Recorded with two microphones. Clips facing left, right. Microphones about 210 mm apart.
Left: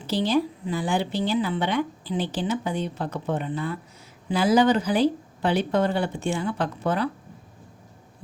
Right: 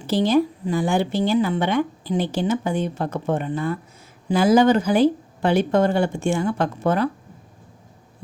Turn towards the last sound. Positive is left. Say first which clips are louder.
# right 4 dB
turn(degrees=-45)  # may be behind; listen again after turning